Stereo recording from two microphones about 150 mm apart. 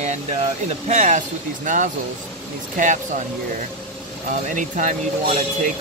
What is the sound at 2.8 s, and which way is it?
Speech, 55° right (ahead or behind).